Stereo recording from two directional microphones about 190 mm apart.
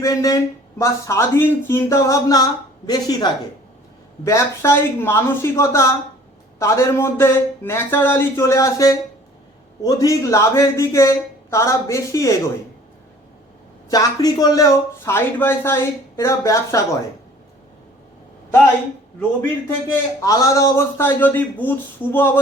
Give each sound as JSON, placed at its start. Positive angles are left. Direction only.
{"t": 0.0, "sound": "speech", "side_deg": 15}
{"t": 13.9, "sound": "speech", "side_deg": 20}
{"t": 19.9, "sound": "speech", "side_deg": 20}